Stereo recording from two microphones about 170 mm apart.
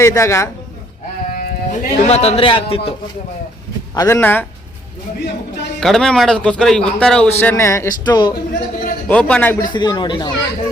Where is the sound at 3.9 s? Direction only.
20° left (ahead or behind).